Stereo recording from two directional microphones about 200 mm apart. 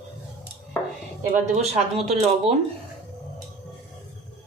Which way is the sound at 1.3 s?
35° right (ahead or behind).